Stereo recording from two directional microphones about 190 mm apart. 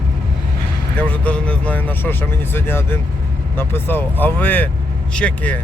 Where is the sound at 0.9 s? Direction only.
5° left (ahead or behind).